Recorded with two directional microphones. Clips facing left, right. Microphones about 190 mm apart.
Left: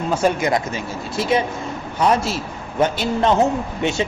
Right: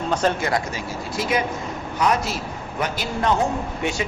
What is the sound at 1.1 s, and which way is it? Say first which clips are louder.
A man's voice: left 4 dB; 25° left (ahead or behind).